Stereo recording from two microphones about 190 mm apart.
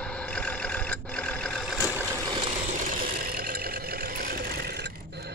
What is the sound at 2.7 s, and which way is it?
Vehicle, 45° right (ahead or behind).